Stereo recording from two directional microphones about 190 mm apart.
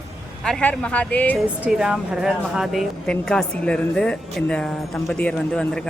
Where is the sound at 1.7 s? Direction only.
5° right (ahead or behind).